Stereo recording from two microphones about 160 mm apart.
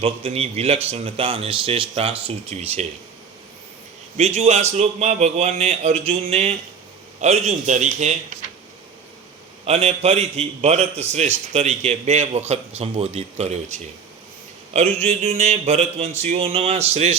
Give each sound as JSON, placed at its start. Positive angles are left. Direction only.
{"t": 0.0, "sound": "a man's voice", "side_deg": -40}
{"t": 4.2, "sound": "a man's voice", "side_deg": -45}
{"t": 9.6, "sound": "a man's voice", "side_deg": -40}